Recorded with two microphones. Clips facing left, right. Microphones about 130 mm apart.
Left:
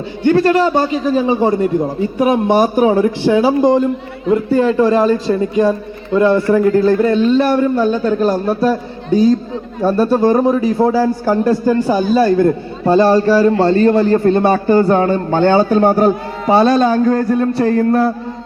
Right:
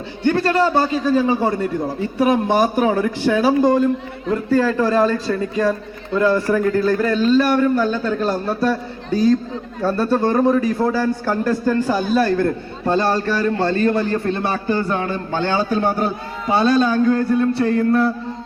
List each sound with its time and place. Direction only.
0.3 s a man's voice: 20° left (ahead or behind)
13.2 s a man's voice: 35° left (ahead or behind)